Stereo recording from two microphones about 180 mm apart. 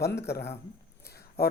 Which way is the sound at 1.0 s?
60° left (ahead or behind).